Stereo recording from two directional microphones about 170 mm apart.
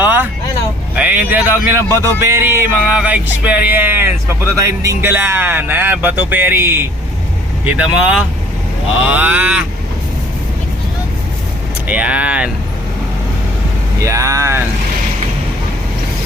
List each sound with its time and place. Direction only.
0.0 s vehicle: 10° right (ahead or behind)
0.9 s music: 10° right (ahead or behind)
7.6 s speech: 5° right (ahead or behind)
9.0 s music: 10° right (ahead or behind)
11.9 s music: 10° right (ahead or behind)
14.0 s music: 20° right (ahead or behind)